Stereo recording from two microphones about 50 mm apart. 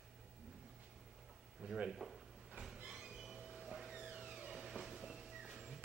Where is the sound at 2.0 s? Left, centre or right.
Centre.